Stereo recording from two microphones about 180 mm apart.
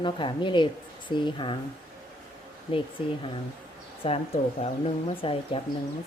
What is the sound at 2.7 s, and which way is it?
Speech, 30° left (ahead or behind).